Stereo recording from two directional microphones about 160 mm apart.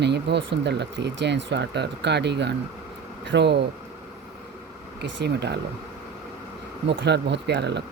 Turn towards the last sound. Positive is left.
turn(degrees=-90)